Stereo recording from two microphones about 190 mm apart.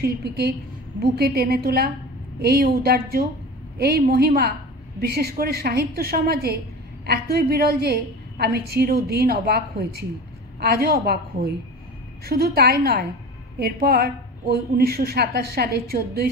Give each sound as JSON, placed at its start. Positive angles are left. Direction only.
{"t": 0.0, "sound": "a woman's voice", "side_deg": -55}